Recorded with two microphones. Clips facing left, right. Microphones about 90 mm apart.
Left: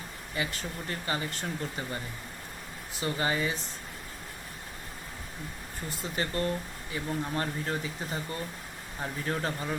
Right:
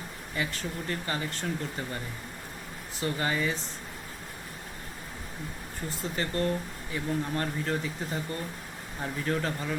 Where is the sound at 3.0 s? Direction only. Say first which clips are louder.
Even; 10° left (ahead or behind).